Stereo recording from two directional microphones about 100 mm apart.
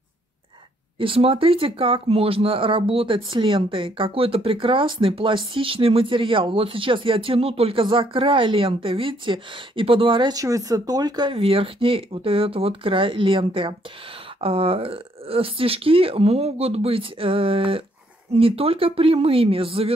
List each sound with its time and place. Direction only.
0.9 s speech: 65° right (ahead or behind)
10.3 s speech: 35° right (ahead or behind)
11.2 s speech: 75° right (ahead or behind)